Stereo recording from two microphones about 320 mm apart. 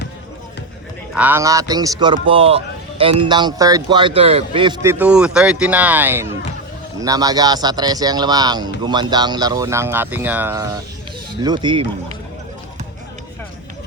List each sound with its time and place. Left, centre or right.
1.1 s speech: centre